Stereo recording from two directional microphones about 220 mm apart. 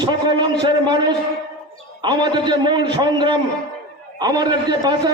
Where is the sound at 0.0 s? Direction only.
20° right (ahead or behind).